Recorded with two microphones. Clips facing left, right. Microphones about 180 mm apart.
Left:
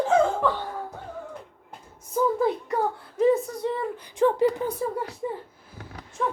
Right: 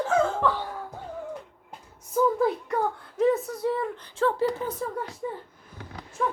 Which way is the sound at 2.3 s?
Centre (ahead or behind).